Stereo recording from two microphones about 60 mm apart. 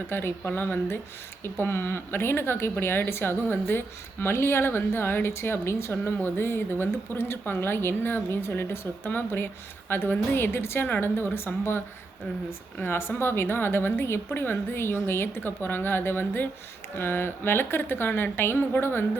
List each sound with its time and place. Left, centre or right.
0.1 s a woman's voice: left
12.8 s a woman's voice: left